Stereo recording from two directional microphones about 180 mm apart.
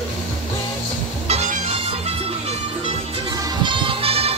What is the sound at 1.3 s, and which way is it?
Music, 40° right (ahead or behind).